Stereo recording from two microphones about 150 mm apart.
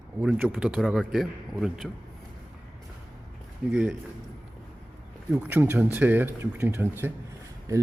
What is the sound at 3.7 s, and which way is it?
Speech, 10° right (ahead or behind).